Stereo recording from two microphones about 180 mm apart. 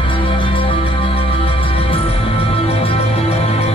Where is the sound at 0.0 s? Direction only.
30° left (ahead or behind).